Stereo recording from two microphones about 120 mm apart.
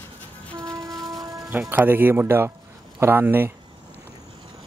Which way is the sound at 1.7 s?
15° right (ahead or behind).